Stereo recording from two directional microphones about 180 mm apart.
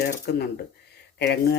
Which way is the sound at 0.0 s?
65° left (ahead or behind).